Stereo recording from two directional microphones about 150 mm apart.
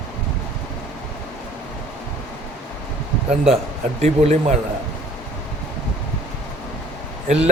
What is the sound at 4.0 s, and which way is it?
Speech, 50° right (ahead or behind).